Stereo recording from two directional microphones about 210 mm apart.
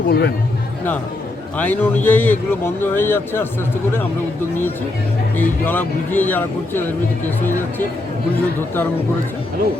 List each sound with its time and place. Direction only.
0.1 s speech: 50° left (ahead or behind)
1.5 s a man's voice: 10° left (ahead or behind)
5.4 s a man's voice: 10° left (ahead or behind)